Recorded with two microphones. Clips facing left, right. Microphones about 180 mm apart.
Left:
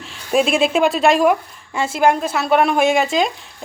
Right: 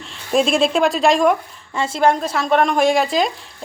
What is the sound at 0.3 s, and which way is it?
A woman's voice, 5° left (ahead or behind).